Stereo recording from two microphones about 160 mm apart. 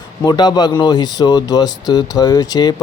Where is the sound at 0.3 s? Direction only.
25° left (ahead or behind).